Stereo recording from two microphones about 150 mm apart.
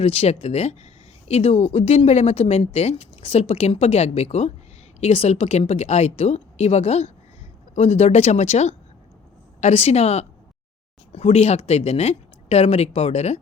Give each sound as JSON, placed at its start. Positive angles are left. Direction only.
{"t": 0.0, "sound": "speech", "side_deg": 40}